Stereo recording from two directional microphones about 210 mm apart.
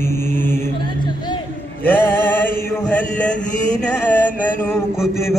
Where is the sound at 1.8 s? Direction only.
10° left (ahead or behind).